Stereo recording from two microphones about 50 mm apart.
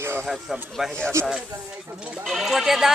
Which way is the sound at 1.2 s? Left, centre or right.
Right.